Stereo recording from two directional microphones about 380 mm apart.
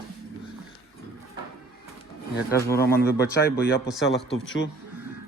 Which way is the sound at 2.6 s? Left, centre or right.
Centre.